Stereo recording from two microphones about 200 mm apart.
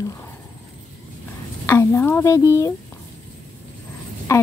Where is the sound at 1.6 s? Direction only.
10° left (ahead or behind).